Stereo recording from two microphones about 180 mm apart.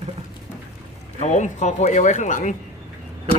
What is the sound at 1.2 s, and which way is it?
Speech, 40° left (ahead or behind).